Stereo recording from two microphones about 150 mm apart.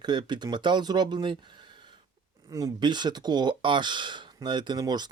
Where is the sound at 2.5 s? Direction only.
25° right (ahead or behind).